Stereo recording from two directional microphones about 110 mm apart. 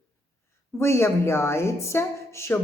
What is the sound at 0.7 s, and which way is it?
A woman's voice, 25° left (ahead or behind).